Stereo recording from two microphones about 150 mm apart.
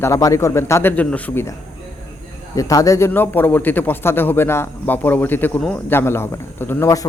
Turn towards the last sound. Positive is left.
turn(degrees=20)  # may be behind; listen again after turning